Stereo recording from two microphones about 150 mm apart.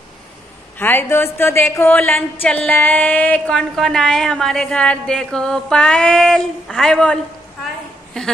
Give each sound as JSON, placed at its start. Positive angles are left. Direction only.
{"t": 0.7, "sound": "a woman's voice", "side_deg": 15}